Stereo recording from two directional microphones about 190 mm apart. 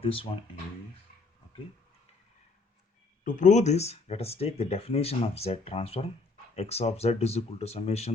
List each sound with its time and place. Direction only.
0.0 s speech: 30° left (ahead or behind)
3.2 s speech: 40° left (ahead or behind)